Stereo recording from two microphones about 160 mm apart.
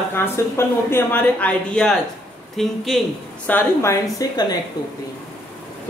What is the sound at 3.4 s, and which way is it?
A woman's voice, 15° left (ahead or behind).